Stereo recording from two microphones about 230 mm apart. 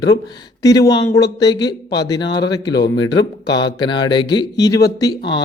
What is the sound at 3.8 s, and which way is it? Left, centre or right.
Speech, centre.